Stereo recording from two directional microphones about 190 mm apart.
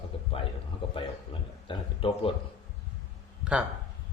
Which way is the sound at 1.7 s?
30° left (ahead or behind).